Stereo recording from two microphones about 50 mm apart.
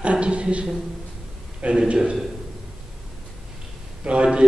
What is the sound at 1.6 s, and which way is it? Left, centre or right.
Speech, right.